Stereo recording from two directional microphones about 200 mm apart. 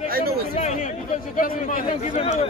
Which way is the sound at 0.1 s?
50° right (ahead or behind).